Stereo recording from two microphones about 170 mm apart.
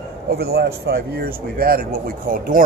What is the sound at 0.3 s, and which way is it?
Speech, 65° right (ahead or behind).